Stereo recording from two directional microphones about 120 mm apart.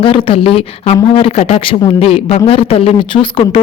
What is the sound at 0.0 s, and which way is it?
A man's voice, 50° left (ahead or behind).